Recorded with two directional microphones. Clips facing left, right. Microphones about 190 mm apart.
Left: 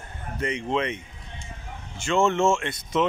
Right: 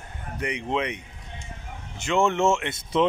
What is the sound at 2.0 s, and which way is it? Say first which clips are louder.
Speech: left 1 dB; 15° right (ahead or behind).